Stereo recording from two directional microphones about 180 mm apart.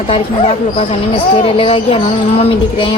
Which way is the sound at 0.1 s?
35° left (ahead or behind).